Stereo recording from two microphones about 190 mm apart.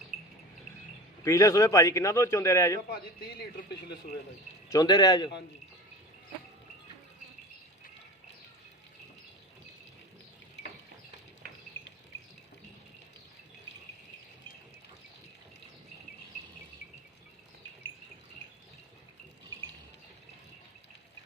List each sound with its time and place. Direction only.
1.2 s a man's voice: 15° left (ahead or behind)
4.7 s speech: 20° left (ahead or behind)
11.8 s cricket: 10° left (ahead or behind)